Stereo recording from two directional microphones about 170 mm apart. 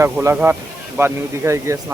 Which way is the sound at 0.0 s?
15° right (ahead or behind).